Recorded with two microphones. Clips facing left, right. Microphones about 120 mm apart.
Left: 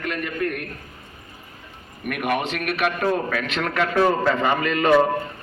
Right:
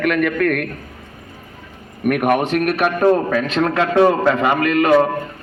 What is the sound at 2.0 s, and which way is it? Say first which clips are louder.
A man's voice: right 8 dB; 50° right (ahead or behind).